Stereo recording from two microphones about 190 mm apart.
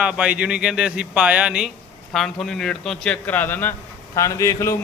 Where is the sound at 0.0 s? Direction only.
5° right (ahead or behind).